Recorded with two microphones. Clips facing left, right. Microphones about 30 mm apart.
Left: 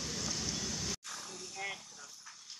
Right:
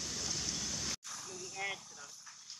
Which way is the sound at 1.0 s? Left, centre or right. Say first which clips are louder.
Left 1 dB; left.